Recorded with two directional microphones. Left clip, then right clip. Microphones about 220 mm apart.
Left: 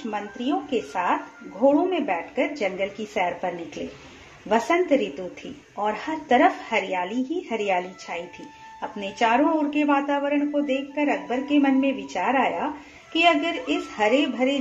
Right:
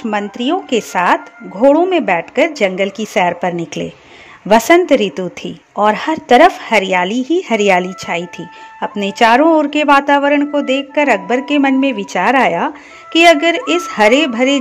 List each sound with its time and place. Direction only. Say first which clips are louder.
0.1 s speech: right 10 dB; 50° right (ahead or behind)